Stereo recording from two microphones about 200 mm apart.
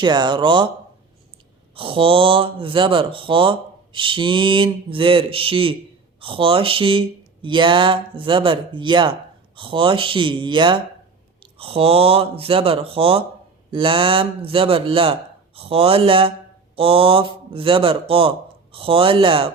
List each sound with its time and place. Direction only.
0.0 s speech: 20° right (ahead or behind)
1.7 s speech: 25° right (ahead or behind)